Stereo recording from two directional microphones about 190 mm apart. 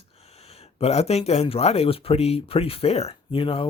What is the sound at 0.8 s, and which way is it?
A man's voice, 35° left (ahead or behind).